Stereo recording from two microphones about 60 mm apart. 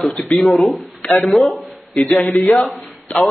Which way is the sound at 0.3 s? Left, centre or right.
Centre.